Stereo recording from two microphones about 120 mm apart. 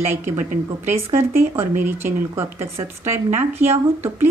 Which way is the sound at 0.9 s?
20° right (ahead or behind).